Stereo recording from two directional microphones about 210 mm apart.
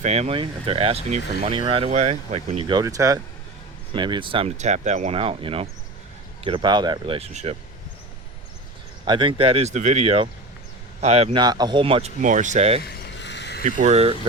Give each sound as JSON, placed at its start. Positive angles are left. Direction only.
{"t": 0.0, "sound": "speech", "side_deg": -30}
{"t": 9.0, "sound": "speech", "side_deg": -25}
{"t": 12.8, "sound": "a sound", "side_deg": 50}
{"t": 13.7, "sound": "speech", "side_deg": -35}